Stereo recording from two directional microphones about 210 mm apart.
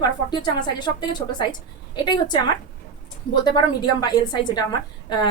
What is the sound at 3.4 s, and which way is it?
A woman's voice, 20° left (ahead or behind).